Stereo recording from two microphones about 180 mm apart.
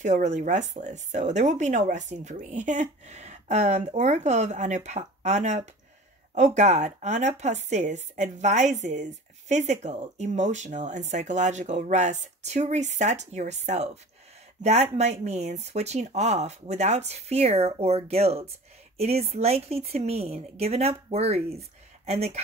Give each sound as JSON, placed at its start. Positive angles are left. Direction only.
{"t": 0.0, "sound": "a woman's voice", "side_deg": -40}